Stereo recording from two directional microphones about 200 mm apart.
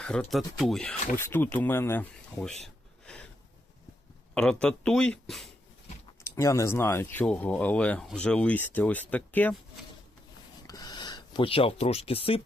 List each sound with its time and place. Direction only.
0.0 s speech: 5° left (ahead or behind)
4.4 s speech: 5° left (ahead or behind)
6.2 s speech: 15° left (ahead or behind)
10.7 s a sound: 20° left (ahead or behind)